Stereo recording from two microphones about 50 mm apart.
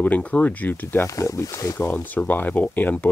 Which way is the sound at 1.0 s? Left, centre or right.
Left.